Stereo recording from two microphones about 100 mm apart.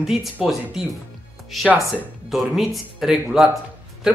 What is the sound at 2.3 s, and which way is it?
Speech, centre (ahead or behind).